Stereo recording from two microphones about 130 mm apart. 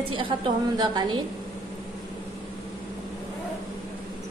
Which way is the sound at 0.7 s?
35° right (ahead or behind).